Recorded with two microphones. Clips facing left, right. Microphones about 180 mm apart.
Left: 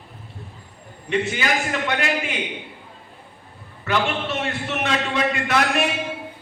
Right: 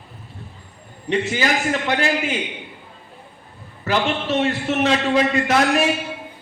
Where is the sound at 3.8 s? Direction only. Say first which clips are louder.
Right 2 dB; 35° right (ahead or behind).